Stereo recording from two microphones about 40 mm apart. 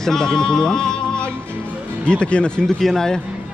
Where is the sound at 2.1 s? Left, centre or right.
Left.